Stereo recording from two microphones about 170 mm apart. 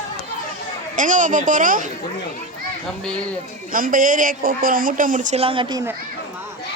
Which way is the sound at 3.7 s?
55° right (ahead or behind).